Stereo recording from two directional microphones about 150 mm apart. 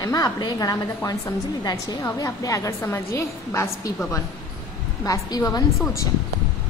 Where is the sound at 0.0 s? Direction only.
25° left (ahead or behind).